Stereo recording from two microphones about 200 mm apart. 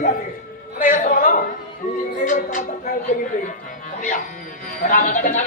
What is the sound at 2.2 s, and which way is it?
Music, 40° left (ahead or behind).